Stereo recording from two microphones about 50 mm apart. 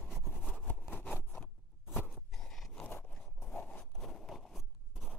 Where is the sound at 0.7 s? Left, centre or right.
Left.